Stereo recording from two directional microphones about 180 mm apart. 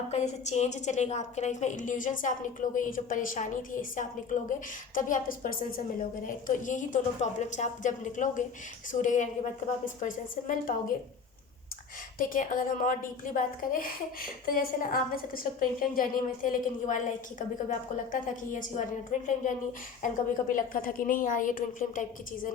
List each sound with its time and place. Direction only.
0.1 s a woman's voice: 40° left (ahead or behind)
12.3 s a woman's voice: 50° left (ahead or behind)